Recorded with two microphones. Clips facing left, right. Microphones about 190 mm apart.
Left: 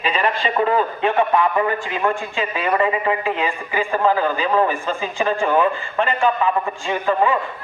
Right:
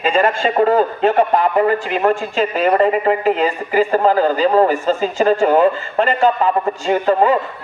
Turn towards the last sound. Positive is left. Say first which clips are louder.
# right 5 dB
turn(degrees=-40)  # may be behind; listen again after turning